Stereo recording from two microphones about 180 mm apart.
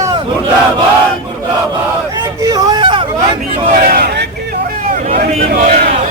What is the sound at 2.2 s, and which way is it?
Hubbub, 20° right (ahead or behind).